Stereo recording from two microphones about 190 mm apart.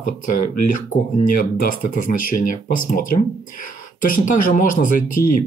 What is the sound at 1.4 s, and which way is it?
Speech, 50° left (ahead or behind).